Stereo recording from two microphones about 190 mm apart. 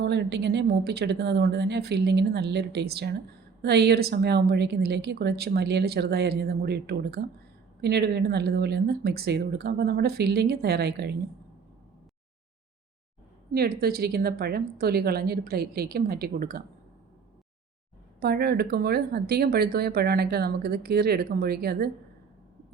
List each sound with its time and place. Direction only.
0.0 s speech: 65° right (ahead or behind)
13.5 s a woman's voice: 55° right (ahead or behind)
18.2 s speech: 55° right (ahead or behind)